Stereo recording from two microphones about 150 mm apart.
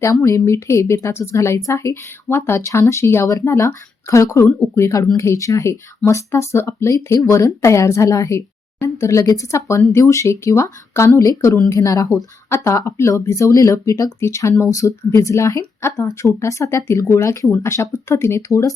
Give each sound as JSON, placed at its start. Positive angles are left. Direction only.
{"t": 0.0, "sound": "speech", "side_deg": 20}